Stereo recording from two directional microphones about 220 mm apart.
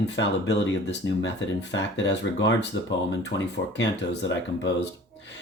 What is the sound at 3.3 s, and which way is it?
Speech, 50° left (ahead or behind).